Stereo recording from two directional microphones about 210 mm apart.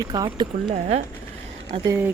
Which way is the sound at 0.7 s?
30° right (ahead or behind).